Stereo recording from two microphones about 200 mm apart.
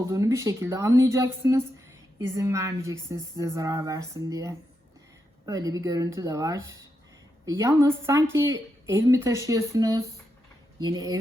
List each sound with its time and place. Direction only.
0.1 s a woman's voice: 15° right (ahead or behind)